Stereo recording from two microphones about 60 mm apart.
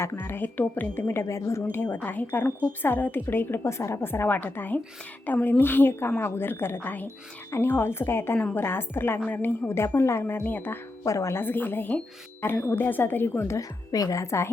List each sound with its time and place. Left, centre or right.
0.0 s a woman's voice: left
1.2 s a woman's voice: left
1.7 s a woman's voice: left
7.5 s a woman's voice: left
10.3 s a woman's voice: left
11.0 s a woman's voice: left
11.3 s a woman's voice: left
13.6 s a woman's voice: left